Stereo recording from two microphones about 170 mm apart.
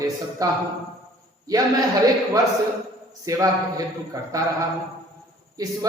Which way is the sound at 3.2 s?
20° right (ahead or behind).